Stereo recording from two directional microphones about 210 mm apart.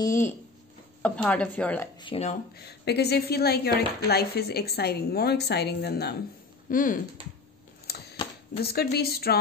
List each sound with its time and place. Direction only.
1.0 s speech: 5° left (ahead or behind)
2.0 s speech: 25° left (ahead or behind)
2.5 s speech: 50° left (ahead or behind)
6.7 s speech: 40° left (ahead or behind)
7.9 s a sound: 50° left (ahead or behind)
8.5 s speech: 50° left (ahead or behind)